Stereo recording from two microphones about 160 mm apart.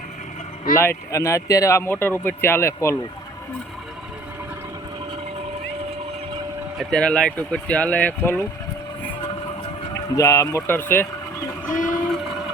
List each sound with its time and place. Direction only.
0.8 s speech: 15° left (ahead or behind)
6.7 s speech: 5° left (ahead or behind)
10.2 s speech: 20° left (ahead or behind)
11.7 s a sound: 55° left (ahead or behind)